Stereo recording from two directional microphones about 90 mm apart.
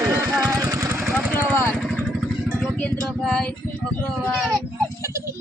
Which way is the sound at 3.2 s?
10° left (ahead or behind).